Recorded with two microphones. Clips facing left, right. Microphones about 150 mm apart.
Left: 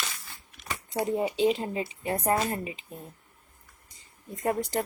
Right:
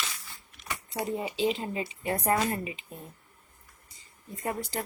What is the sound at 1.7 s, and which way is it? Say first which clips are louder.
A woman's voice: left 1 dB; 35° left (ahead or behind).